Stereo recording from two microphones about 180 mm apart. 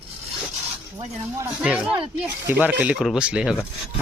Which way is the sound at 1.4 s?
5° right (ahead or behind).